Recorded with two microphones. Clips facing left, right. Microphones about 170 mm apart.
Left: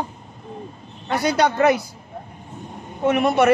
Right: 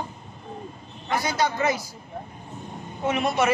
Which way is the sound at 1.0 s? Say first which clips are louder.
Left 5 dB; 65° left (ahead or behind).